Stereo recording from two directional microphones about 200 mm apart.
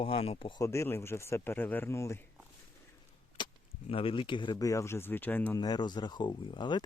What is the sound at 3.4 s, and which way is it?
Chop, 25° left (ahead or behind).